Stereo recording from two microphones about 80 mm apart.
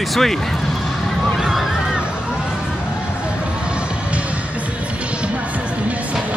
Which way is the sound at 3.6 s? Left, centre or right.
Centre.